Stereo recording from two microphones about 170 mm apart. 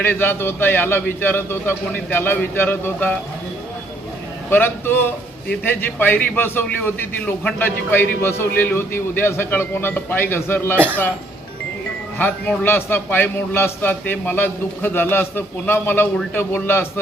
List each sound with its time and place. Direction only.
0.0 s a man's voice: 10° left (ahead or behind)
4.4 s a man's voice: 10° left (ahead or behind)
12.2 s a man's voice: 10° left (ahead or behind)